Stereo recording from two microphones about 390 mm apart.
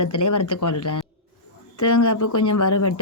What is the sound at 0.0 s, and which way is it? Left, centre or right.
Speech, left.